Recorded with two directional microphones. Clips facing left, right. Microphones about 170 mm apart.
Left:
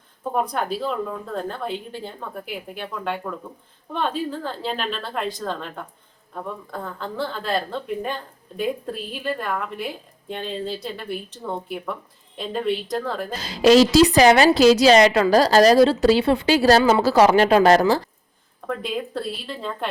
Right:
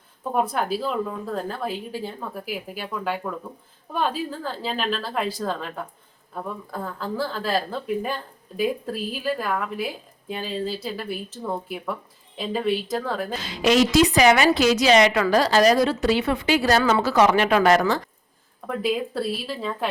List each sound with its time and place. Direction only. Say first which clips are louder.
0.3 s a woman's voice: right 1 dB; 5° right (ahead or behind)
13.3 s a woman's voice: left 6 dB; 40° left (ahead or behind)
18.8 s a woman's voice: right 7 dB; 5° right (ahead or behind)